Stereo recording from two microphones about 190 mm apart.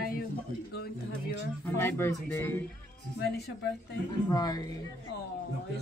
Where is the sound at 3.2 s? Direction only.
60° left (ahead or behind).